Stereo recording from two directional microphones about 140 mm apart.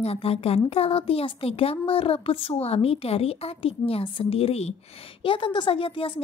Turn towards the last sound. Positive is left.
turn(degrees=40)  # may be behind; listen again after turning